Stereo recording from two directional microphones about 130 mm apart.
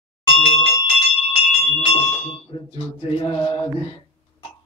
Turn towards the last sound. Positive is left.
turn(degrees=40)  # may be behind; listen again after turning